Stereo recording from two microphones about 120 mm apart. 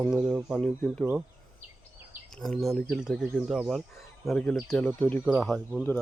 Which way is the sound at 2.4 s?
5° left (ahead or behind).